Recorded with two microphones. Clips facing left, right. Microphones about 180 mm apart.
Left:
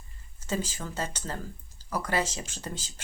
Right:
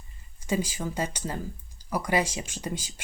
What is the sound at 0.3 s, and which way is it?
Speech, 10° right (ahead or behind).